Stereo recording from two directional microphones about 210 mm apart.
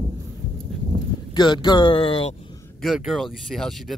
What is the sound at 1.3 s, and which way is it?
Speech, 20° left (ahead or behind).